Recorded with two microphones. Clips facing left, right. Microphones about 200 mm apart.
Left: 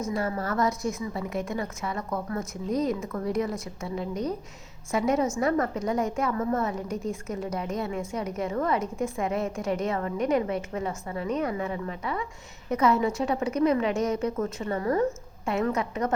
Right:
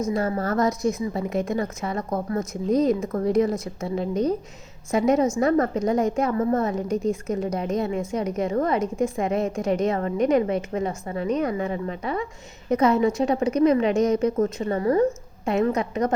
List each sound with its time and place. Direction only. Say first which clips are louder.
0.2 s a woman's voice: right 2 dB; 40° right (ahead or behind)
0.7 s a woman's voice: right 6 dB; 20° right (ahead or behind)
1.5 s a woman's voice: right 5 dB; 35° right (ahead or behind)
2.4 s a woman's voice: right 7 dB; 20° right (ahead or behind)
6.4 s a woman's voice: right 5 dB; 35° right (ahead or behind)
6.8 s a woman's voice: right 7 dB; 20° right (ahead or behind)
14.3 s a woman's voice: right 6 dB; 30° right (ahead or behind)